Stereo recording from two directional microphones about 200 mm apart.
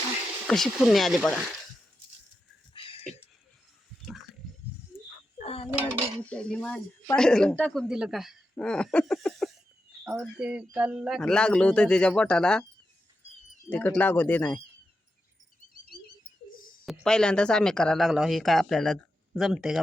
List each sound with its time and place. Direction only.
0.4 s speech: centre (ahead or behind)
2.7 s a sound: 25° left (ahead or behind)
5.4 s dishes: 30° left (ahead or behind)
6.2 s speech: 5° left (ahead or behind)
13.7 s speech: 10° left (ahead or behind)
15.9 s a sound: 50° left (ahead or behind)
16.8 s speech: centre (ahead or behind)